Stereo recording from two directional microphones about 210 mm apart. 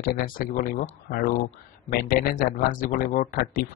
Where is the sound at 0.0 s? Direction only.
40° left (ahead or behind).